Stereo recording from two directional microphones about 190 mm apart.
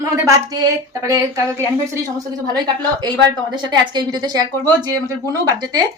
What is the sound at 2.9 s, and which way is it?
Speech, 20° right (ahead or behind).